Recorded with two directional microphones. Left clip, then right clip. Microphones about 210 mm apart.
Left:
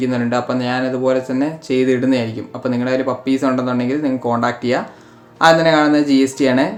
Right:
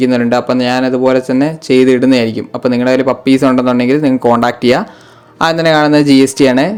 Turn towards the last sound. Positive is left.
turn(degrees=-45)  # may be behind; listen again after turning